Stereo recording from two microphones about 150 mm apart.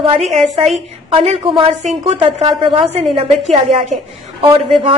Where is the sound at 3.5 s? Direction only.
55° right (ahead or behind).